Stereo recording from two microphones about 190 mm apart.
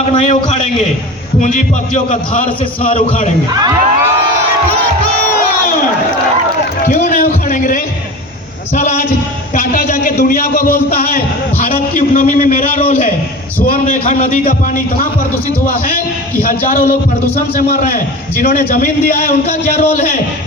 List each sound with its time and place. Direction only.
0.2 s a man's voice: 35° left (ahead or behind)
3.5 s speech: 20° right (ahead or behind)
6.8 s a sound: 40° left (ahead or behind)
8.7 s a man's voice: 40° left (ahead or behind)
12.8 s a man's voice: 35° left (ahead or behind)
16.4 s a man's voice: 45° left (ahead or behind)